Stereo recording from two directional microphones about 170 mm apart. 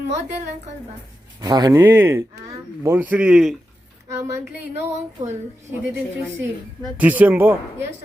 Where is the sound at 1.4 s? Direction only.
25° right (ahead or behind); by 3.6 s centre (ahead or behind).